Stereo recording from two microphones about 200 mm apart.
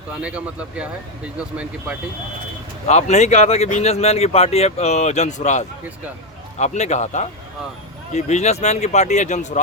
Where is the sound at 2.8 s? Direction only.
35° left (ahead or behind).